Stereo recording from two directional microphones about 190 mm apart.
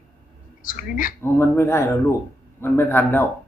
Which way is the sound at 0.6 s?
45° left (ahead or behind).